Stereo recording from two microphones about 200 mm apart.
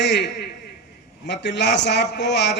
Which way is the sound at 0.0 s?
60° left (ahead or behind).